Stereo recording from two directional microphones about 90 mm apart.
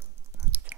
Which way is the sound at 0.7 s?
15° right (ahead or behind).